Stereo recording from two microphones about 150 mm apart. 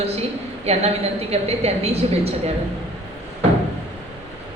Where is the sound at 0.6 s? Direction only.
45° right (ahead or behind).